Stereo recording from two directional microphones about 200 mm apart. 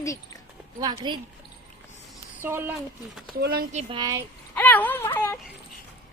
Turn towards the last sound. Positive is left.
turn(degrees=10)  # may be behind; listen again after turning